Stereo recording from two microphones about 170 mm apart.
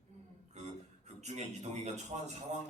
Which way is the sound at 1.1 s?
40° right (ahead or behind).